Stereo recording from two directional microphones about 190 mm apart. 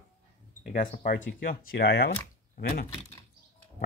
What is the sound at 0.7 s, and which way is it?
Speech, 45° left (ahead or behind).